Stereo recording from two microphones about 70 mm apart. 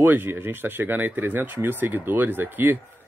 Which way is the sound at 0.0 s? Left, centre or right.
Right.